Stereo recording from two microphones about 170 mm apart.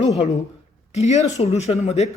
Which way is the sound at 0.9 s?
40° left (ahead or behind).